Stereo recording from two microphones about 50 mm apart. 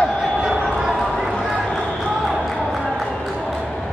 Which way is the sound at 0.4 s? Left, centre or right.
Centre.